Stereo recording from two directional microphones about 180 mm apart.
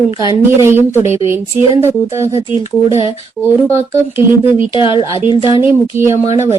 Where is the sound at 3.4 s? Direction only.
15° right (ahead or behind).